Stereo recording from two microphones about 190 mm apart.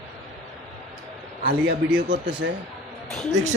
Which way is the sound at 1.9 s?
60° right (ahead or behind).